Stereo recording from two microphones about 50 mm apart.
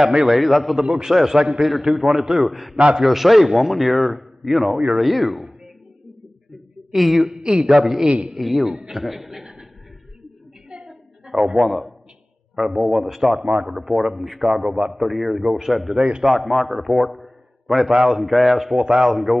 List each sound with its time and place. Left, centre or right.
0.0 s a man's voice: centre
6.9 s a man's voice: centre
7.3 s a man's voice: centre
9.4 s a sound: centre
10.9 s a sound: centre
12.5 s a man's voice: centre